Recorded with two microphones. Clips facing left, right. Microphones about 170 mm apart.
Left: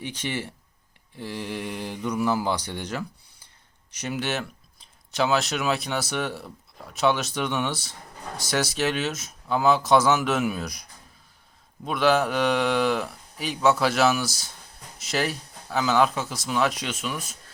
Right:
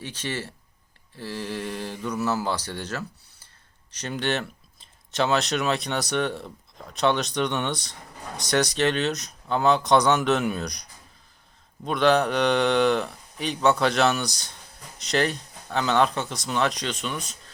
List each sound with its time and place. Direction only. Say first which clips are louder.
0.0 s speech: left 1 dB; 15° left (ahead or behind)
11.9 s speech: right 1 dB; 5° left (ahead or behind)